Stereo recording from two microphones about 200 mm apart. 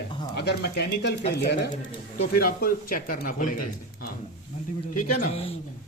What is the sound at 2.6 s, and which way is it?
Speech, 45° left (ahead or behind).